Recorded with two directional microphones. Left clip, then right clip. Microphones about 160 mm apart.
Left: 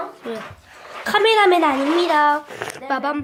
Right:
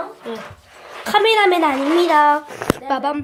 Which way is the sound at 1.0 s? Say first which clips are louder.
Right 1 dB; centre (ahead or behind).